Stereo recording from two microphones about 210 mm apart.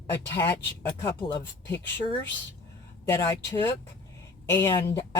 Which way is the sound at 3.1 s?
15° left (ahead or behind).